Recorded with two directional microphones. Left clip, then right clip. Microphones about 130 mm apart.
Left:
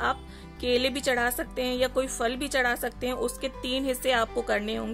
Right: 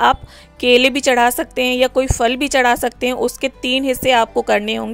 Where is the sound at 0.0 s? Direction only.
65° right (ahead or behind).